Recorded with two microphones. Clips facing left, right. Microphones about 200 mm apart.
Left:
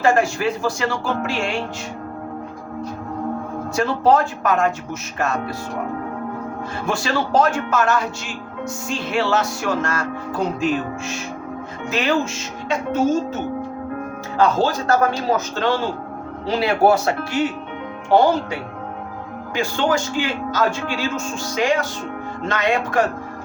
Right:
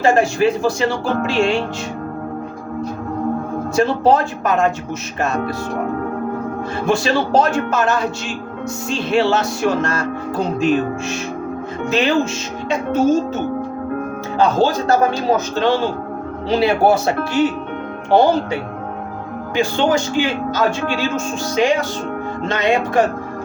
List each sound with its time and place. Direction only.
0.0 s music: 25° right (ahead or behind)
3.8 s music: 25° right (ahead or behind)
6.8 s music: 25° right (ahead or behind)
11.9 s music: 25° right (ahead or behind)
14.3 s music: 20° right (ahead or behind)